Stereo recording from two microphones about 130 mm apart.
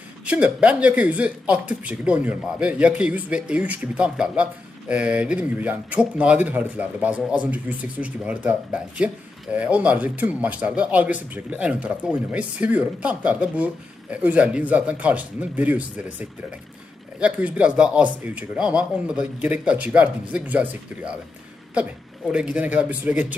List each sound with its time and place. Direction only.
0.2 s speech: 10° right (ahead or behind)
21.7 s speech: 10° right (ahead or behind)